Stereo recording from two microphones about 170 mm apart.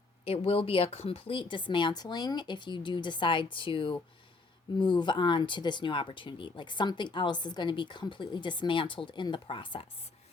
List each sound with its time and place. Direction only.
0.3 s speech: 35° left (ahead or behind)